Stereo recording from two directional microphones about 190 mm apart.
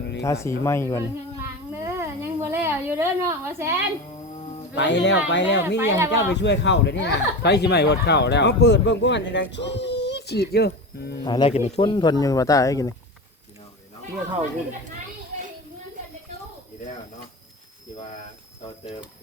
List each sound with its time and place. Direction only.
0.2 s speech: 15° left (ahead or behind)
1.4 s a sound: 15° right (ahead or behind)
4.7 s speech: 70° left (ahead or behind)
5.8 s speech: 15° right (ahead or behind)
6.1 s speech: 65° left (ahead or behind)
11.2 s speech: 25° left (ahead or behind)